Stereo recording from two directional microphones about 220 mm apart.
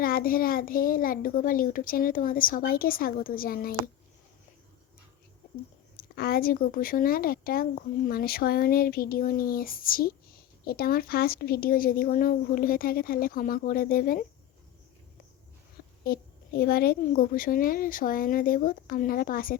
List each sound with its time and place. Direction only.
0.0 s speech: 40° left (ahead or behind)
6.0 s speech: 45° left (ahead or behind)
16.0 s speech: 45° left (ahead or behind)